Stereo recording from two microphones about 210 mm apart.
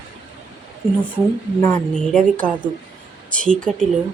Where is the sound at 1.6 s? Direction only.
5° left (ahead or behind).